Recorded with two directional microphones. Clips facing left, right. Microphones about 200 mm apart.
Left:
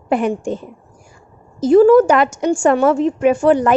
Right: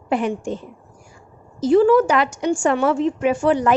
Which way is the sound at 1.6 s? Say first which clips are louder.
Left 5 dB; 45° left (ahead or behind).